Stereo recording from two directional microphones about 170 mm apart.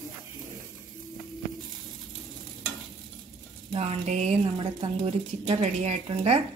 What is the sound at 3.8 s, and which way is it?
A woman's voice, 40° right (ahead or behind).